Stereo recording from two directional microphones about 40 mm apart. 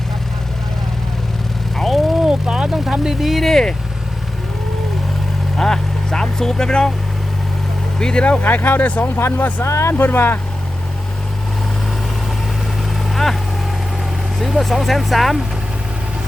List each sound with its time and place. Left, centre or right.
1.7 s vehicle: centre
2.2 s vehicle: centre
3.2 s speech: centre
5.5 s speech: centre
7.9 s speech: centre
8.4 s speech: left
9.1 s speech: left
14.3 s speech: centre